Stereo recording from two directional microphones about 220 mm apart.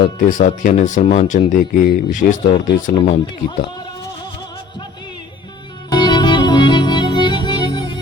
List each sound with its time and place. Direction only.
0.0 s speech: 35° left (ahead or behind)
5.9 s music: 20° left (ahead or behind)